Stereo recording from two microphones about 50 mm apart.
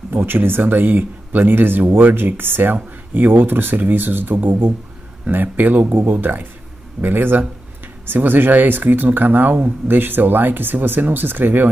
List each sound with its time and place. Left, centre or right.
0.1 s speech: right